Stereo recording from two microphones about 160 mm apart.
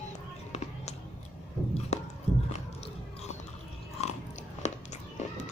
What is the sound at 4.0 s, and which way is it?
Biting, 45° left (ahead or behind).